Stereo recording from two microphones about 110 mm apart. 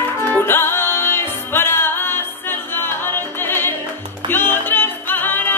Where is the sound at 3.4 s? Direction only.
20° left (ahead or behind).